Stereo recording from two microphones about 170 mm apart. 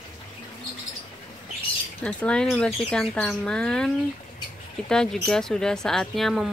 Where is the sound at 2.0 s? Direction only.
5° left (ahead or behind).